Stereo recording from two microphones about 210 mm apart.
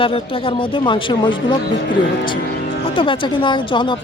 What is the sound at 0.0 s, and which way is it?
Speech, 25° left (ahead or behind).